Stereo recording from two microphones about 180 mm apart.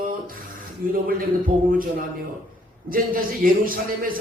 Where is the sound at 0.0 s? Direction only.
50° right (ahead or behind).